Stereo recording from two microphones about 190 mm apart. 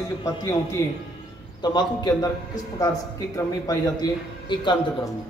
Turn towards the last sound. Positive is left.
turn(degrees=20)  # may be behind; listen again after turning